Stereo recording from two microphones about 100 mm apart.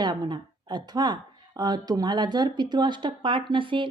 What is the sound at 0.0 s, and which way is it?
Speech, 45° right (ahead or behind).